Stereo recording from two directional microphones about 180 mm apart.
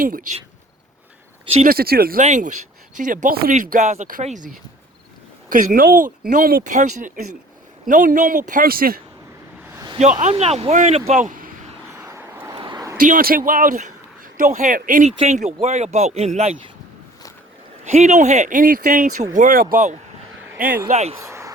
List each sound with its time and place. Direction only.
0.0 s speech: 50° right (ahead or behind)
1.6 s speech: 55° right (ahead or behind)
2.2 s speech: 45° right (ahead or behind)
9.7 s a sound: 25° right (ahead or behind)
10.0 s a man's voice: 40° right (ahead or behind)
11.9 s vehicle: 15° right (ahead or behind)
12.5 s a sound: 25° right (ahead or behind)
13.0 s a man's voice: 50° right (ahead or behind)
17.8 s speech: 40° right (ahead or behind)
20.9 s a man's voice: 35° right (ahead or behind)
21.2 s a sound: 15° right (ahead or behind)